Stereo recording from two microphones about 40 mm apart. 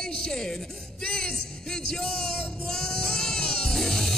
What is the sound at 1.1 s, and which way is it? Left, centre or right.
Music, centre.